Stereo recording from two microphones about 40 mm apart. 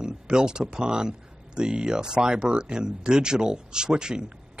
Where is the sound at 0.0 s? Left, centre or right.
Right.